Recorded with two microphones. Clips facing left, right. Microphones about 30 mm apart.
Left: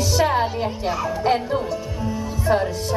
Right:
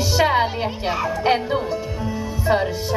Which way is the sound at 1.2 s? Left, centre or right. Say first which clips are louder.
Right 1 dB; right.